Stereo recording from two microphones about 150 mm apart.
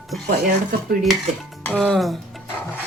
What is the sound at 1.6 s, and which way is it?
Speech, 5° left (ahead or behind).